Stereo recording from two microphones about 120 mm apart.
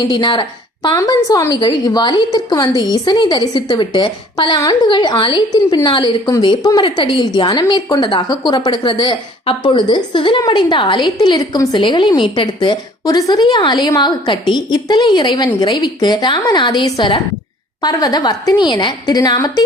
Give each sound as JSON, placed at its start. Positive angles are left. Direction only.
{"t": 0.1, "sound": "a woman's voice", "side_deg": 40}